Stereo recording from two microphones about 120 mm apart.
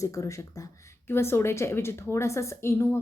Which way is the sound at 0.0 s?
25° left (ahead or behind).